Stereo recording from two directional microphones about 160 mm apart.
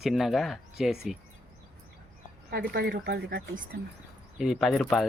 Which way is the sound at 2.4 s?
75° right (ahead or behind).